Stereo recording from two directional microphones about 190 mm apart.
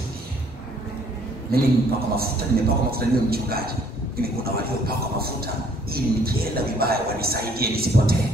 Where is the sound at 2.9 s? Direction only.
55° right (ahead or behind).